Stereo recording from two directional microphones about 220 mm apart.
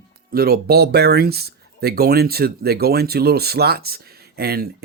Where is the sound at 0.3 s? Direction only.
45° right (ahead or behind).